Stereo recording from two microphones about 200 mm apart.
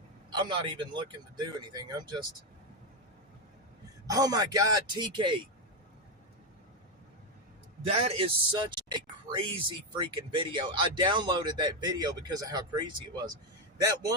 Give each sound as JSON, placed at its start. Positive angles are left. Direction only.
{"t": 0.3, "sound": "speech", "side_deg": -25}
{"t": 4.0, "sound": "speech", "side_deg": -20}
{"t": 7.9, "sound": "speech", "side_deg": -30}